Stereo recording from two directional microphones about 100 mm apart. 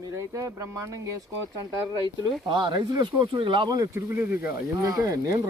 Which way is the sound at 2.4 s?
50° right (ahead or behind).